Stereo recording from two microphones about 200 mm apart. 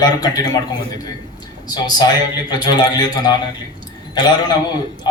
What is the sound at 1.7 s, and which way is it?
A man's voice, 20° left (ahead or behind).